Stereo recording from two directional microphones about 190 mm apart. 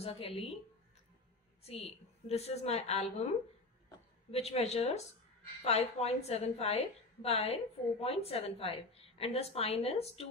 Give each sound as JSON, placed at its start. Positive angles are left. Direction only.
{"t": 0.0, "sound": "a woman's voice", "side_deg": 30}
{"t": 1.6, "sound": "a woman's voice", "side_deg": 30}
{"t": 4.3, "sound": "a woman's voice", "side_deg": 35}